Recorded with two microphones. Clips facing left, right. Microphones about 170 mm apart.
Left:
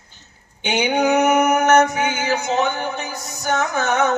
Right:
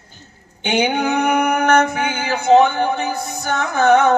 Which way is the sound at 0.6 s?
50° right (ahead or behind).